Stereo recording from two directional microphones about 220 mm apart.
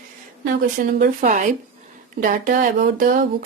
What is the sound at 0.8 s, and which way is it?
Speech, 40° right (ahead or behind).